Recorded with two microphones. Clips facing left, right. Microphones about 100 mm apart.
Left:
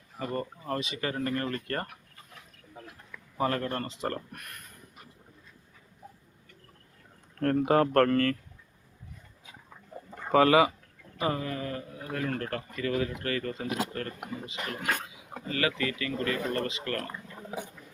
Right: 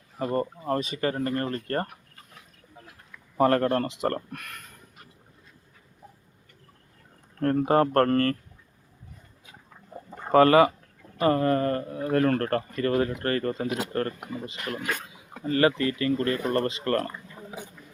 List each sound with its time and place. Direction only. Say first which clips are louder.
0.2 s speech: right 6 dB; 45° right (ahead or behind)
3.3 s speech: right 8 dB; 55° right (ahead or behind); by 4.6 s 90° right
7.3 s speech: right 2 dB; 35° right (ahead or behind)
10.2 s speech: right 4 dB; 50° right (ahead or behind)
15.4 s speech: right 7 dB; 35° right (ahead or behind)